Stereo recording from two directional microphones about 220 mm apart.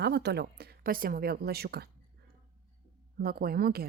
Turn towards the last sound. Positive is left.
turn(degrees=-45)  # may be behind; listen again after turning